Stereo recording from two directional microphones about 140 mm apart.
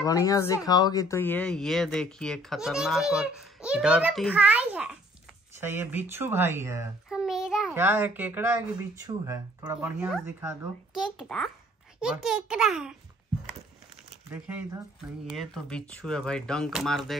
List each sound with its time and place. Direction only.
0.0 s speech: 25° left (ahead or behind); by 6.9 s 20° right (ahead or behind)
7.1 s a sound: 5° right (ahead or behind)
7.7 s speech: 15° right (ahead or behind)
9.8 s speech: 10° right (ahead or behind)
15.2 s speech: centre (ahead or behind)